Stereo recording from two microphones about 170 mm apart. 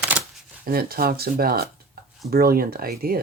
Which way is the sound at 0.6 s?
60° right (ahead or behind).